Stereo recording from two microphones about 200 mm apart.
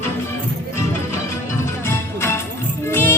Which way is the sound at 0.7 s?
15° left (ahead or behind).